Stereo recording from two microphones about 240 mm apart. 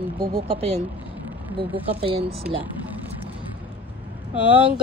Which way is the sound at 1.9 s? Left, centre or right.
Right.